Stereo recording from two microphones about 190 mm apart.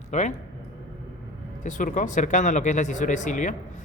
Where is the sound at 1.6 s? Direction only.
40° left (ahead or behind).